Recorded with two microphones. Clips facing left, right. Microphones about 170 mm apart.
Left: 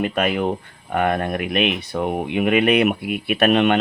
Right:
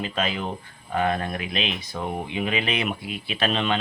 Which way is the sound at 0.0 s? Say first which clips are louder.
Left 7 dB; 60° left (ahead or behind).